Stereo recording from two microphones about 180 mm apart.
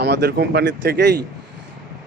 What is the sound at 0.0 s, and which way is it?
Speech, 70° right (ahead or behind).